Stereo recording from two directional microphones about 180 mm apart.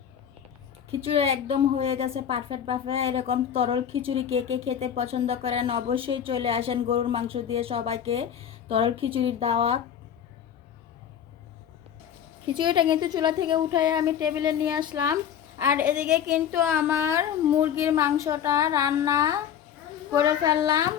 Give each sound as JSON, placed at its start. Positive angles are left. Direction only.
{"t": 0.9, "sound": "speech", "side_deg": -30}
{"t": 12.5, "sound": "a woman's voice", "side_deg": -25}